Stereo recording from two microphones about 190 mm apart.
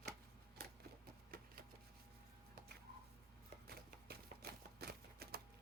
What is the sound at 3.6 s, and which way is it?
Typewriter, 55° right (ahead or behind).